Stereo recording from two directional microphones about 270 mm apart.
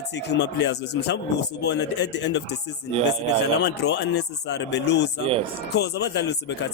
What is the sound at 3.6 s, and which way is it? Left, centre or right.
A man's voice, left.